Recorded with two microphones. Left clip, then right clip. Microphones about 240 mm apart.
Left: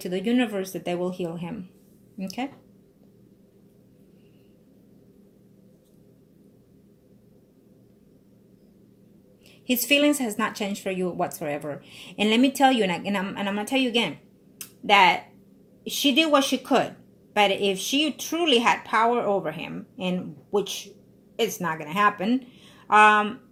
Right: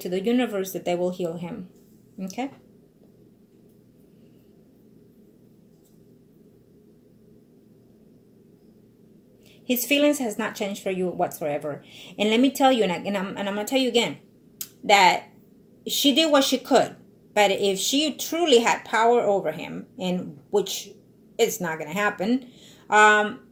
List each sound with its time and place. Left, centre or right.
0.0 s speech: left
9.6 s speech: left
14.6 s a sound: left
15.8 s speech: centre